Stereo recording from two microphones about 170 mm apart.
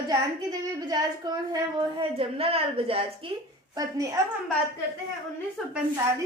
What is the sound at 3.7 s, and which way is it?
Speech, 20° right (ahead or behind).